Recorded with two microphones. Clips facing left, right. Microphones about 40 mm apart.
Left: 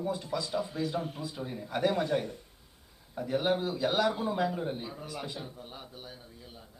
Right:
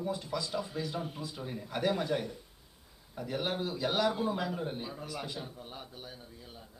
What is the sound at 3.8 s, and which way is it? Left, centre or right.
A man's voice, centre.